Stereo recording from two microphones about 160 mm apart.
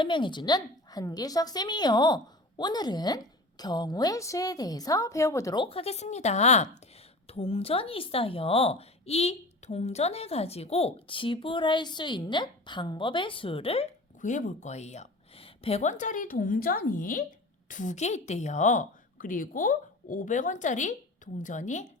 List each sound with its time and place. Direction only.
0.0 s a woman's voice: 30° left (ahead or behind)
5.6 s a woman's voice: 35° left (ahead or behind)
14.2 s a woman's voice: 50° left (ahead or behind)